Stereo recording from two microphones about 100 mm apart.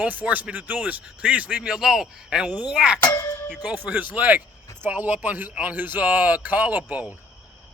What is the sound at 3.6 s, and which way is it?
Speech, 15° right (ahead or behind).